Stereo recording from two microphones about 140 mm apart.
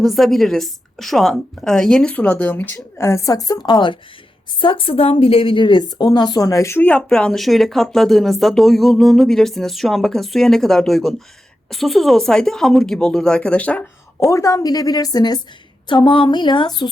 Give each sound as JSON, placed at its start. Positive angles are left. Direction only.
{"t": 0.0, "sound": "a woman's voice", "side_deg": 0}
{"t": 14.3, "sound": "a woman's voice", "side_deg": 20}